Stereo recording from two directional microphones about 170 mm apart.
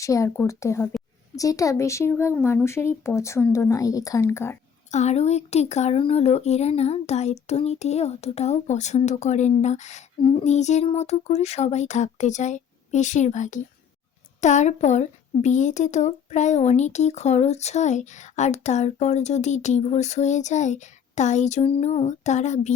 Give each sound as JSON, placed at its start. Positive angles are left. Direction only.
{"t": 0.0, "sound": "speech", "side_deg": 20}
{"t": 4.9, "sound": "speech", "side_deg": 45}